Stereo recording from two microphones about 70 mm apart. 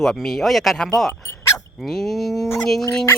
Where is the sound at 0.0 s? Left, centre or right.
Centre.